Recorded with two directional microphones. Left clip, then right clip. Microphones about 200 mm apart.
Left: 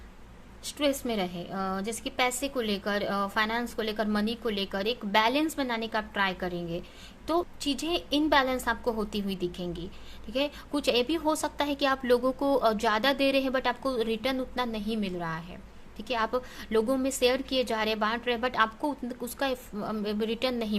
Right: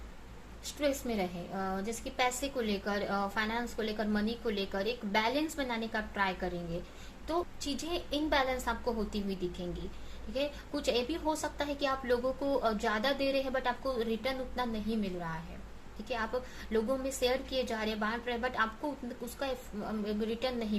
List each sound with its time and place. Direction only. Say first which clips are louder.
0.6 s a woman's voice: left 4 dB; 40° left (ahead or behind)